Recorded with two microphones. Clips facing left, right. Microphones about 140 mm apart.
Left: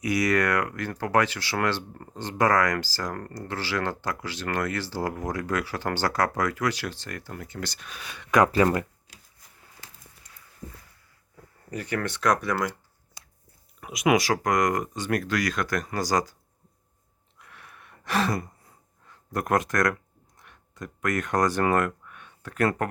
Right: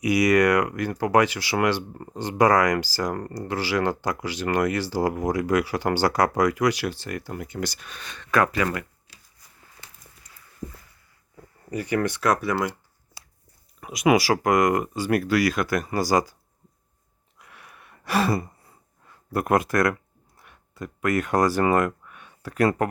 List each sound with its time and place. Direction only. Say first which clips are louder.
0.0 s speech: right 5 dB; 10° right (ahead or behind)
7.8 s speech: even; 5° left (ahead or behind)
8.5 s speech: left 4 dB; 30° left (ahead or behind)
11.7 s speech: right 5 dB; 10° right (ahead or behind)
13.2 s biting: right 2 dB; 5° right (ahead or behind)
13.7 s speech: right 3 dB; centre (ahead or behind)
17.3 s a sound: right 1 dB; 10° right (ahead or behind)